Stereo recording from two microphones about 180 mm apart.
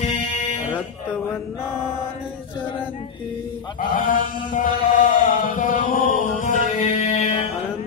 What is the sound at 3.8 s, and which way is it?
Chant, 50° left (ahead or behind).